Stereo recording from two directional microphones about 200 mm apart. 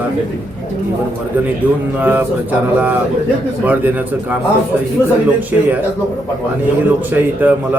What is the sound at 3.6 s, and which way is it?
Speech, 10° right (ahead or behind).